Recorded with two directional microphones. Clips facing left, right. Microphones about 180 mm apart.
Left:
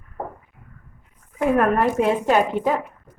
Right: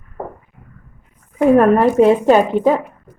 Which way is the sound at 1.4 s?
30° right (ahead or behind).